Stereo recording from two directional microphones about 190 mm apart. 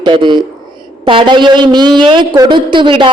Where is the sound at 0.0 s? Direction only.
25° right (ahead or behind).